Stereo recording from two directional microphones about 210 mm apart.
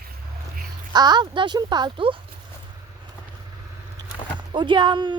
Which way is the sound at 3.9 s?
20° right (ahead or behind).